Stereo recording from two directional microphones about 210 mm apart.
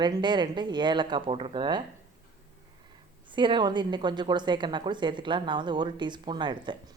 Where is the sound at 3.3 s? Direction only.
20° right (ahead or behind).